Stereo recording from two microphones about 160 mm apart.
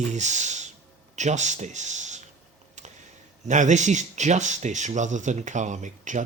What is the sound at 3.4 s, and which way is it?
Speech, 50° right (ahead or behind).